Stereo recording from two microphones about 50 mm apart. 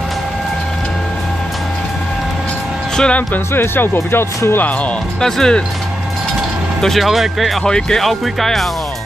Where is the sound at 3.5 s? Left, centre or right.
Left.